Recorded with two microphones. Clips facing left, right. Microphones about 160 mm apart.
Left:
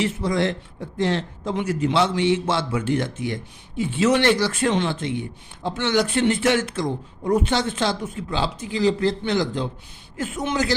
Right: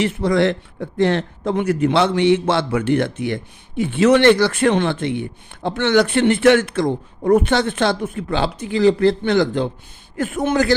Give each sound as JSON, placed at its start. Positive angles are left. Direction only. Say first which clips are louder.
{"t": 0.0, "sound": "a man's voice", "louder": "right 5 dB", "side_deg": -65}